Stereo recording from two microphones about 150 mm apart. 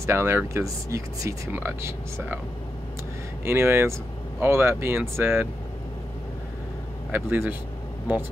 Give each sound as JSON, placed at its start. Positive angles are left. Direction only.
{"t": 0.0, "sound": "speech", "side_deg": -15}
{"t": 3.4, "sound": "speech", "side_deg": -15}
{"t": 7.1, "sound": "speech", "side_deg": -15}